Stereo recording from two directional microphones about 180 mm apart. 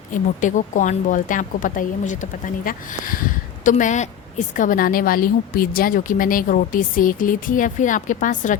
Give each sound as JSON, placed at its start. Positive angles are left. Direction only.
{"t": 0.1, "sound": "a woman's voice", "side_deg": 45}